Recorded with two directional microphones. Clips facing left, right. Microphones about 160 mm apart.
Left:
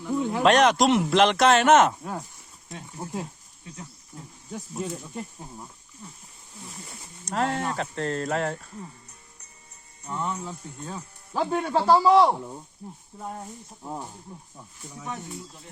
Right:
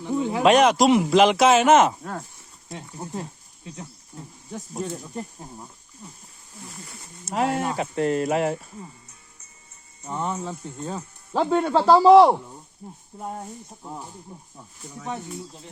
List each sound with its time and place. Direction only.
0.2 s speech: 5° right (ahead or behind)
2.6 s speech: 20° right (ahead or behind)
4.8 s speech: centre (ahead or behind)
7.3 s speech: 10° right (ahead or behind)
10.0 s speech: 20° right (ahead or behind)
14.3 s speech: 15° right (ahead or behind)